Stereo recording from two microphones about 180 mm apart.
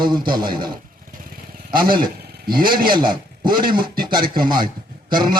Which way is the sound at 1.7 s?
55° right (ahead or behind).